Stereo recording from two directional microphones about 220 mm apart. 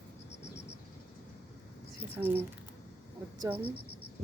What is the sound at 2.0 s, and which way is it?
Speech, 10° right (ahead or behind).